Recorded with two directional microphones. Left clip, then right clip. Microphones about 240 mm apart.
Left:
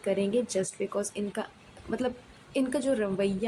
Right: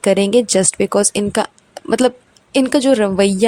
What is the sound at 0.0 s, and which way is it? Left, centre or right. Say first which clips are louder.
A woman's voice: right 15 dB; right.